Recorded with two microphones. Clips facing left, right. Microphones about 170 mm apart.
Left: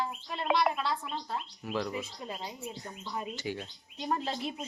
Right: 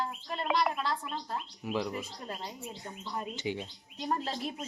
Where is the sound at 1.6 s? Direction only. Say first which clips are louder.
Right 1 dB; 10° right (ahead or behind).